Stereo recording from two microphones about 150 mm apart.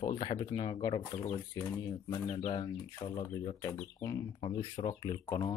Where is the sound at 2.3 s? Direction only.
30° left (ahead or behind).